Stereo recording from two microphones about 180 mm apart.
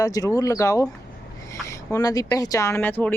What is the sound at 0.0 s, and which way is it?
Speech, 20° left (ahead or behind).